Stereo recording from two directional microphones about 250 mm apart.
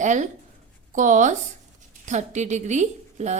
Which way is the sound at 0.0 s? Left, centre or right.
Right.